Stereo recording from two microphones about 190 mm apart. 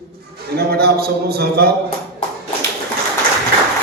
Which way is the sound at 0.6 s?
55° right (ahead or behind).